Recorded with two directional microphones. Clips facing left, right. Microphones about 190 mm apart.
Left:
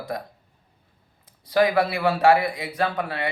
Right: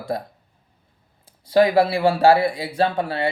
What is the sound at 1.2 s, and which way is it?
A man's voice, 30° right (ahead or behind).